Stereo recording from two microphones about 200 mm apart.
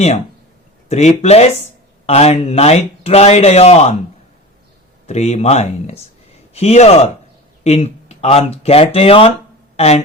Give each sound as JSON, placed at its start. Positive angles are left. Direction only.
{"t": 0.9, "sound": "speech", "side_deg": 35}
{"t": 5.0, "sound": "a man's voice", "side_deg": 35}